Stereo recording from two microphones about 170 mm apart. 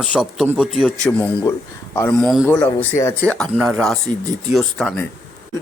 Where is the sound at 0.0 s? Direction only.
5° right (ahead or behind).